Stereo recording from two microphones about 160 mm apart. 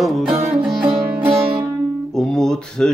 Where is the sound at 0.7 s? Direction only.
5° right (ahead or behind).